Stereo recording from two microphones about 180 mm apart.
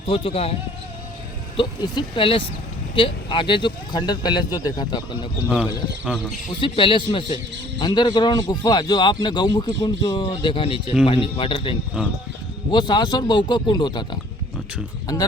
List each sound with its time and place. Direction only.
0.1 s speech: 30° left (ahead or behind)
1.5 s speech: 25° left (ahead or behind)
6.6 s speech: 30° left (ahead or behind)
12.9 s speech: 25° left (ahead or behind)